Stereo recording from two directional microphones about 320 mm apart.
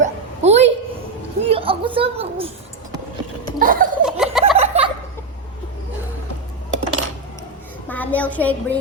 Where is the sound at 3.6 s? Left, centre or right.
Right.